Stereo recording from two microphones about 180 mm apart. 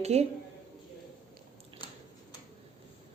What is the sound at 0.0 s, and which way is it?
Speech, 35° right (ahead or behind).